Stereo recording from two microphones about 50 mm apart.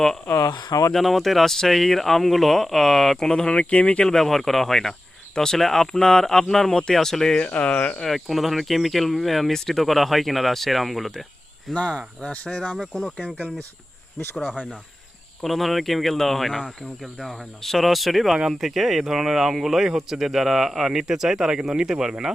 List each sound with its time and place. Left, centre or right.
0.9 s speech: centre; by 4.1 s left
4.1 s speech: centre
7.3 s speech: left
8.0 s speech: centre
11.7 s speech: left
13.3 s speech: left
15.4 s speech: centre